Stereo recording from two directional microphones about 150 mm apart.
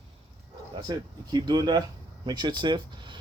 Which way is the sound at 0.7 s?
30° right (ahead or behind).